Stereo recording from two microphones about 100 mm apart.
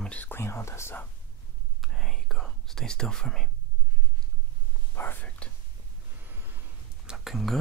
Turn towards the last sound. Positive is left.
turn(degrees=0)  # may be behind; listen again after turning